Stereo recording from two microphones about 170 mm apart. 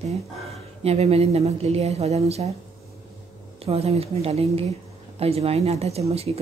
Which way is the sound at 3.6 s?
35° right (ahead or behind).